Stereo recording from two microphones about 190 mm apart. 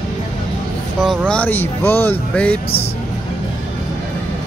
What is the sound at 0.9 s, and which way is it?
Speech, 5° left (ahead or behind).